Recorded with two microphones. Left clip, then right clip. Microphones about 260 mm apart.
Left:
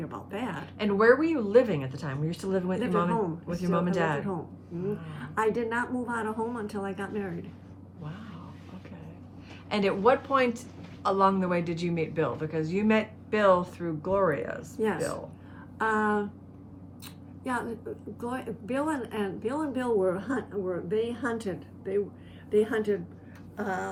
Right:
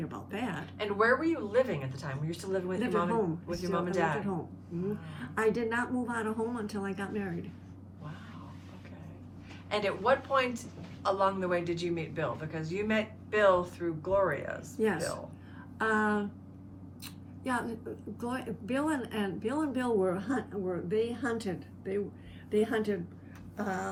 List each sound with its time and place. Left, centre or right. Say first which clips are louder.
0.0 s a sound: left 2 dB; centre
0.8 s a woman's voice: left 6 dB; left
5.2 s speech: left 2 dB; centre
9.6 s a woman's voice: left 4 dB; left
14.8 s speech: left 2 dB; centre
17.4 s speech: left 2 dB; centre